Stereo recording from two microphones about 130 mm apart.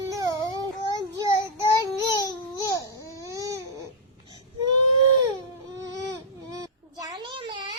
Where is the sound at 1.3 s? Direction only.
30° left (ahead or behind).